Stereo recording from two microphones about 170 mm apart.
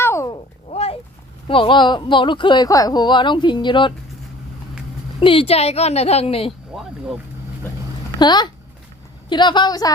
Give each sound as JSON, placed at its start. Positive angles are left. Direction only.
{"t": 0.0, "sound": "cat", "side_deg": 15}
{"t": 0.7, "sound": "a sound", "side_deg": 35}
{"t": 1.5, "sound": "speech", "side_deg": 30}
{"t": 5.2, "sound": "a woman's voice", "side_deg": 30}
{"t": 8.2, "sound": "speech", "side_deg": 25}